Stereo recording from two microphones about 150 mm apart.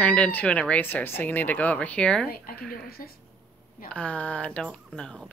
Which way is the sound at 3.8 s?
10° left (ahead or behind).